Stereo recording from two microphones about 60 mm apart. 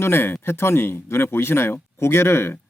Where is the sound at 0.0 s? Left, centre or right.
Left.